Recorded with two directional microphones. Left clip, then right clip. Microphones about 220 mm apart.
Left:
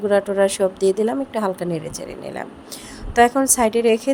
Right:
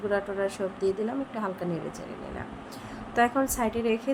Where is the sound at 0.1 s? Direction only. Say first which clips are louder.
Left 12 dB; 40° left (ahead or behind).